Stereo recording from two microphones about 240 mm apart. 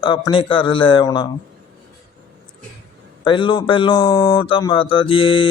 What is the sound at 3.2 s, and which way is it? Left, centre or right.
Speech, left.